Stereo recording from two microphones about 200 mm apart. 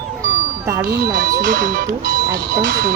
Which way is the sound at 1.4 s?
40° right (ahead or behind).